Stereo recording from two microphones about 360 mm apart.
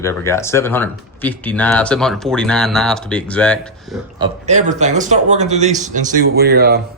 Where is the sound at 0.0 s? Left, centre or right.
Centre.